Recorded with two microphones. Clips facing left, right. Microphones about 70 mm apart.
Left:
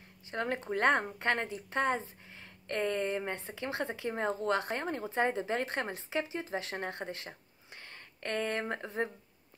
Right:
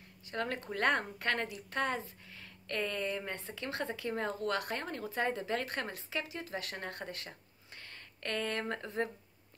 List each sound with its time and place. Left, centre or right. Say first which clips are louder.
0.3 s a woman's voice: left 3 dB; left